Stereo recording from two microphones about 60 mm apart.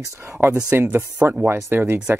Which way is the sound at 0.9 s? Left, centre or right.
Right.